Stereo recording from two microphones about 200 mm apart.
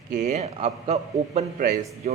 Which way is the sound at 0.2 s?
35° right (ahead or behind).